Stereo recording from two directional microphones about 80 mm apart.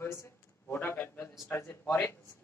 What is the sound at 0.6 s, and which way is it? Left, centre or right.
A man's voice, centre.